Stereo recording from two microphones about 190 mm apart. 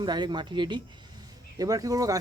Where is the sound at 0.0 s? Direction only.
25° right (ahead or behind).